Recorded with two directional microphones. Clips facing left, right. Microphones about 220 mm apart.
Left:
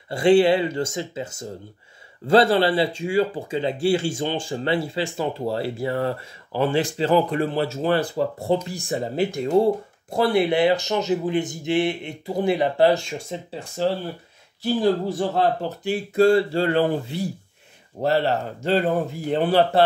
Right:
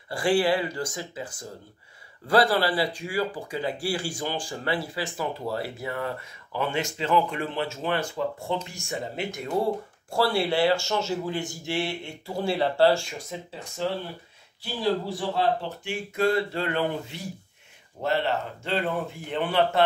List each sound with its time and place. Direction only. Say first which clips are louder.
0.1 s speech: left 7 dB; 25° left (ahead or behind)
13.8 s speech: left 6 dB; 35° left (ahead or behind)
14.6 s speech: left 6 dB; 45° left (ahead or behind)